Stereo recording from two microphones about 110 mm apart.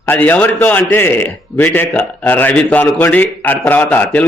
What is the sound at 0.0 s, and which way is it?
A man's voice, 15° left (ahead or behind).